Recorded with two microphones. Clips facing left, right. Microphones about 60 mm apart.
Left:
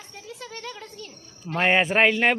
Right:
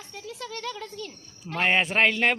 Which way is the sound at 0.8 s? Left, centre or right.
Right.